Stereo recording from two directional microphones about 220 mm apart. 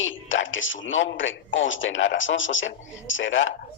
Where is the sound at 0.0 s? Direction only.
60° left (ahead or behind).